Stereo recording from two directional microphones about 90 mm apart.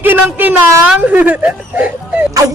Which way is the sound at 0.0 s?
20° right (ahead or behind).